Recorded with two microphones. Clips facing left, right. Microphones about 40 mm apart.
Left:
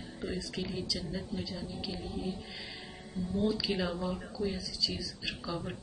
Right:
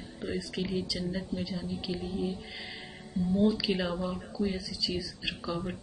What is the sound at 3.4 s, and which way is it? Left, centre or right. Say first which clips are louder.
Speech: even; centre.